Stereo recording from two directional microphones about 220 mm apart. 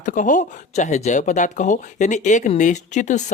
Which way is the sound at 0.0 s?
35° left (ahead or behind).